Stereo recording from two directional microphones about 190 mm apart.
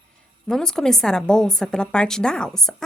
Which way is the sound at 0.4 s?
5° left (ahead or behind).